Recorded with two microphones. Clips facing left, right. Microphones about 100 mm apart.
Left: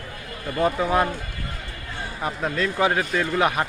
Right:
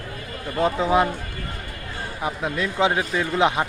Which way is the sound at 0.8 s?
15° right (ahead or behind).